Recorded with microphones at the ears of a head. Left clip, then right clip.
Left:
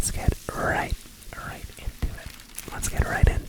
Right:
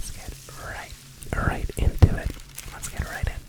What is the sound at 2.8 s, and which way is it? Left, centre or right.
Whispering, left.